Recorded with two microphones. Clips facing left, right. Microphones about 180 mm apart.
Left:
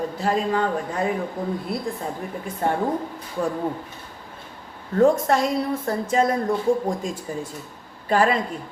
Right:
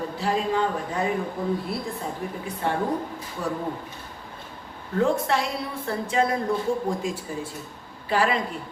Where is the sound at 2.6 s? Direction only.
50° left (ahead or behind).